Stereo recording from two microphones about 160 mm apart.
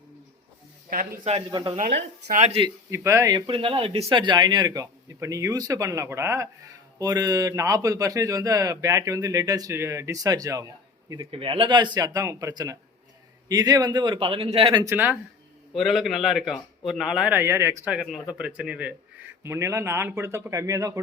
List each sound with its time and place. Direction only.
0.9 s speech: 65° right (ahead or behind)
1.2 s speech: 40° right (ahead or behind)
2.9 s a man's voice: 20° right (ahead or behind)
14.8 s a man's voice: 10° right (ahead or behind)